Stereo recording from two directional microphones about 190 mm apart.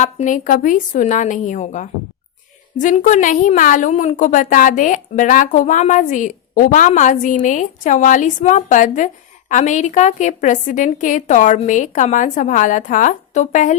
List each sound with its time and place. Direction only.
0.0 s a woman's voice: 40° left (ahead or behind)